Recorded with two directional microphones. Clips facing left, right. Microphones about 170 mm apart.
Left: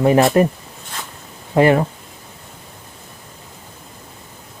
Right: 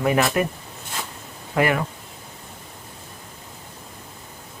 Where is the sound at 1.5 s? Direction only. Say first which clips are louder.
Left 8 dB; 30° left (ahead or behind).